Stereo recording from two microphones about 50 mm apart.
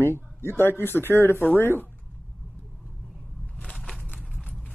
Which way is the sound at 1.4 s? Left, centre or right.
Left.